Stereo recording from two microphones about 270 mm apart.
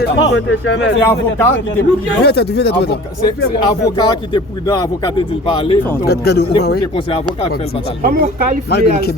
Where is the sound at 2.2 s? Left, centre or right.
Left.